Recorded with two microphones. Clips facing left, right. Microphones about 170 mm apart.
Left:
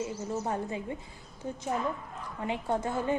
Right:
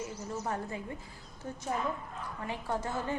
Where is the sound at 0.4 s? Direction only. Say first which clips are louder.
Left 1 dB; 20° left (ahead or behind).